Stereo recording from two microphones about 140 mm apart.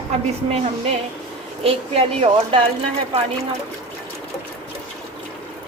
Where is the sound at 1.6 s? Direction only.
45° right (ahead or behind).